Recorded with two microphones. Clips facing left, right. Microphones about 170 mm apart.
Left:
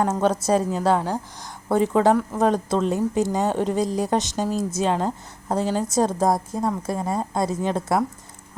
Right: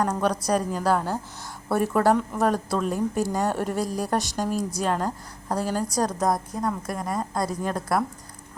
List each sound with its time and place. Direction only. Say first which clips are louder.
0.0 s a woman's voice: left 3 dB; 25° left (ahead or behind)